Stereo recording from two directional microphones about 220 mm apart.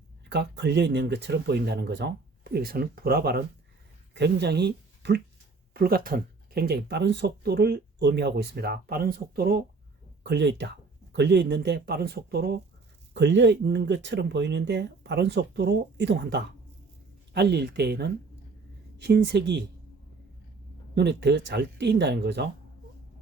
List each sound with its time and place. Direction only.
0.3 s speech: 50° right (ahead or behind)
20.9 s speech: 50° right (ahead or behind)